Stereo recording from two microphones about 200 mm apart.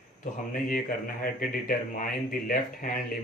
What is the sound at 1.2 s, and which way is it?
Speech, 45° left (ahead or behind).